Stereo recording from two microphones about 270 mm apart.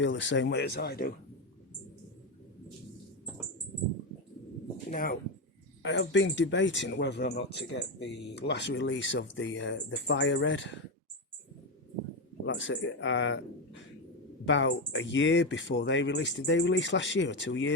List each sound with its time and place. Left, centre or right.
0.0 s speech: left
4.9 s speech: left
5.8 s speech: left
12.5 s speech: left